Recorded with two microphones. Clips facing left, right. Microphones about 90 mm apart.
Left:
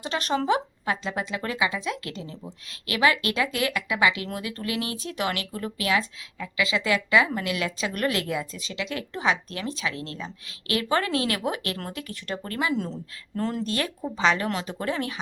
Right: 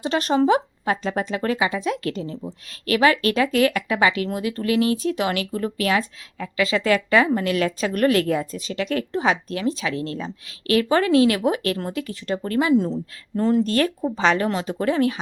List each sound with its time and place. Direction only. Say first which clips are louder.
0.0 s speech: right 7 dB; 35° right (ahead or behind)
13.7 s speech: right 8 dB; 35° right (ahead or behind)